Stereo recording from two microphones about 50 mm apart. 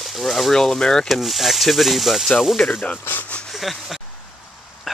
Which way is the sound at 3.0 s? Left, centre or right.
Left.